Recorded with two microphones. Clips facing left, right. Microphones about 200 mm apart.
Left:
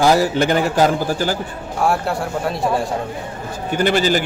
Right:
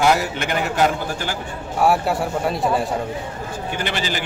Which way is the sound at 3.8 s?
45° left (ahead or behind).